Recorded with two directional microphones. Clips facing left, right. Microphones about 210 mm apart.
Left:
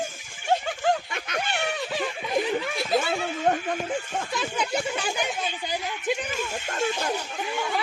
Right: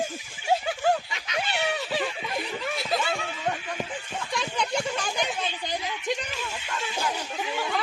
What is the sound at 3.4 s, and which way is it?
Speech, 45° left (ahead or behind).